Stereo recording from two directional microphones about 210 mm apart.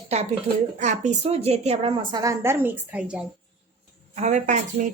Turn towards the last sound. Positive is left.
turn(degrees=-35)  # may be behind; listen again after turning